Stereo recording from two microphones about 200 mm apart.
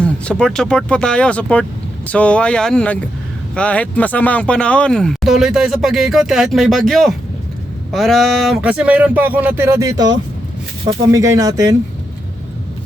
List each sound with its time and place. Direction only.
0.0 s speech: 5° left (ahead or behind); by 11.8 s 15° right (ahead or behind)